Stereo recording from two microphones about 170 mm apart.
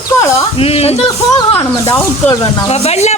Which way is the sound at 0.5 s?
35° left (ahead or behind).